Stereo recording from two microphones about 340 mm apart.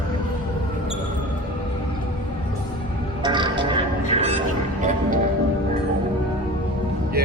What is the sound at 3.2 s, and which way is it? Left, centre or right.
Music, centre.